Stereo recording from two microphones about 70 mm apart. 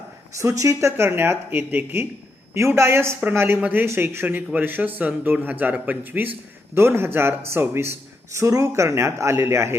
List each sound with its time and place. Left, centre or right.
0.3 s a man's voice: right
6.7 s speech: right